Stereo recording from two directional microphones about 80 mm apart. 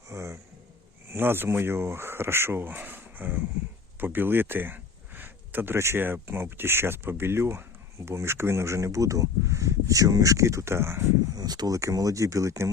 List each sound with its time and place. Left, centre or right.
0.1 s speech: right
11.3 s speech: right